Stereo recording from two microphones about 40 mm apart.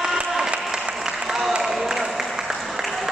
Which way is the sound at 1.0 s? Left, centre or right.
Centre.